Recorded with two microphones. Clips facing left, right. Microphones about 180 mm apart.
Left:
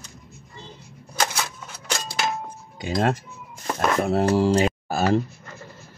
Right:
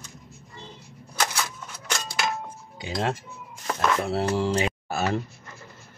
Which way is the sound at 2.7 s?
50° left (ahead or behind).